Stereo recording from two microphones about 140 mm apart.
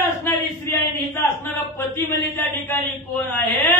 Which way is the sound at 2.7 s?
15° left (ahead or behind).